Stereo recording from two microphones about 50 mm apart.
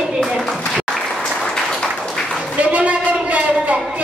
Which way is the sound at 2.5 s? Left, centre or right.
Right.